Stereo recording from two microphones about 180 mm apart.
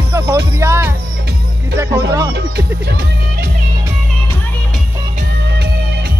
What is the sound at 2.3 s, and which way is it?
Speech, 65° right (ahead or behind).